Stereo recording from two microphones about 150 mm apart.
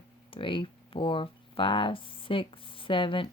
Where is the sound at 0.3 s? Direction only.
35° left (ahead or behind).